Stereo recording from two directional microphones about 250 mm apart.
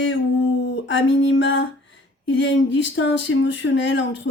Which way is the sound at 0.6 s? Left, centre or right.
Left.